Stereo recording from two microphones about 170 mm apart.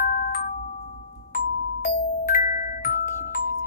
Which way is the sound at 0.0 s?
60° left (ahead or behind).